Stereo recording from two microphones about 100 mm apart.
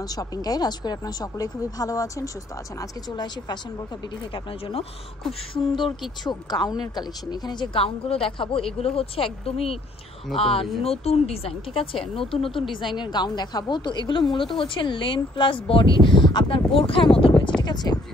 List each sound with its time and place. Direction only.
0.1 s speech: 40° left (ahead or behind)
5.5 s speech: 65° left (ahead or behind)
6.2 s a woman's voice: 45° left (ahead or behind); by 8.6 s 65° left (ahead or behind)
8.7 s a woman's voice: 75° left (ahead or behind)
10.8 s a woman's voice: 90° left; by 12.6 s 60° left (ahead or behind)
12.9 s a woman's voice: 50° left (ahead or behind)
17.6 s a woman's voice: 45° left (ahead or behind)